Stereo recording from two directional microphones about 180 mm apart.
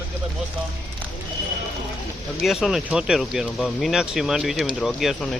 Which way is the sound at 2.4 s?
Centre (ahead or behind).